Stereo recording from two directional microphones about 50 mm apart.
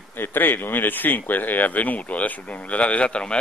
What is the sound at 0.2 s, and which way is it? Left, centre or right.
Speech, left.